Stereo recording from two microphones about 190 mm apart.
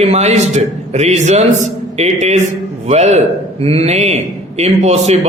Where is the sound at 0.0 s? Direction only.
35° right (ahead or behind).